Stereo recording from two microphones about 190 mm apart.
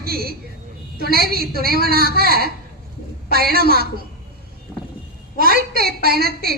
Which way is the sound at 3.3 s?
55° right (ahead or behind).